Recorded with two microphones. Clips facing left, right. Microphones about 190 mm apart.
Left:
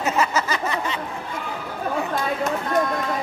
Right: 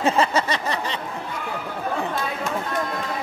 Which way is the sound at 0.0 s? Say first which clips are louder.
Right 2 dB; 30° right (ahead or behind).